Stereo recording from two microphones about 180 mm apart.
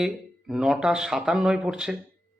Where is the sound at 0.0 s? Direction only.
Centre (ahead or behind).